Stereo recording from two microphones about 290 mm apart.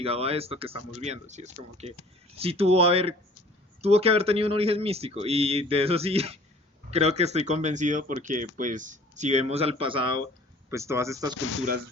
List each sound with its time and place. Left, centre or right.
0.0 s speech: right
0.8 s speech: left
1.0 s speech: right
11.3 s speech: left